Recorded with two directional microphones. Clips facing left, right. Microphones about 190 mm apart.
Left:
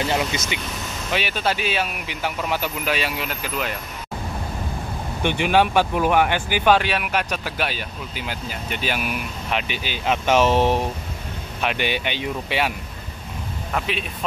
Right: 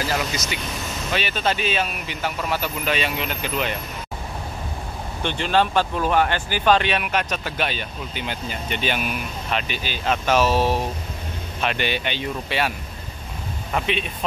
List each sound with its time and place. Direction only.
0.0 s speech: 25° left (ahead or behind)
1.1 s speech: 10° left (ahead or behind)
5.2 s speech: 10° left (ahead or behind)
13.7 s speech: 5° left (ahead or behind)